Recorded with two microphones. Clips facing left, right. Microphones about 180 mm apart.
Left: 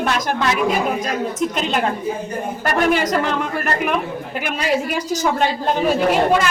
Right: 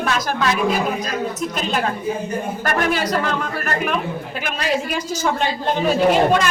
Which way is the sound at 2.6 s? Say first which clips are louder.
Left 4 dB; 15° left (ahead or behind).